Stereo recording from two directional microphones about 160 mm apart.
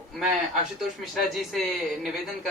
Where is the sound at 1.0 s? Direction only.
Centre (ahead or behind).